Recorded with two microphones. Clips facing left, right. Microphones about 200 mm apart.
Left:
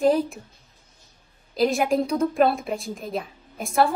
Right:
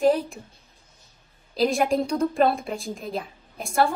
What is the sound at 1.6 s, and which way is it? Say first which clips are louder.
A woman's voice: left 1 dB; centre (ahead or behind).